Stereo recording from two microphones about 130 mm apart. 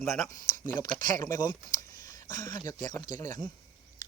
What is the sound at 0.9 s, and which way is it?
Speech, 30° left (ahead or behind).